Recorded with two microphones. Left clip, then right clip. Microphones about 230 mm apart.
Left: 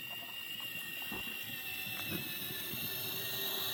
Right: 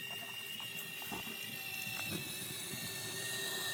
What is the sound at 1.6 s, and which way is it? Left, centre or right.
Train, left.